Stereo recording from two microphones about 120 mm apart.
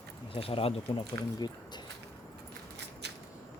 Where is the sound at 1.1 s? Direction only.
35° left (ahead or behind).